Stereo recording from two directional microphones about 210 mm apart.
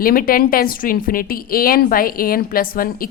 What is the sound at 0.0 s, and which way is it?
A woman's voice, 45° left (ahead or behind).